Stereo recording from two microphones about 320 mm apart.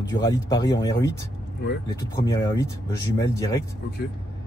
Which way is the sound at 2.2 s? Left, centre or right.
Centre.